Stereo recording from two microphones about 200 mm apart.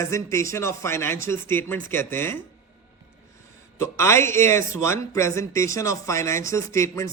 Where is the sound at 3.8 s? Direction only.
15° left (ahead or behind).